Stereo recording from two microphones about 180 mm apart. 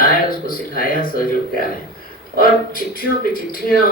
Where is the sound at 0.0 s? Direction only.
50° left (ahead or behind).